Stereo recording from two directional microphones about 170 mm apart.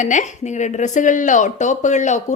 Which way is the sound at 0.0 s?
45° left (ahead or behind).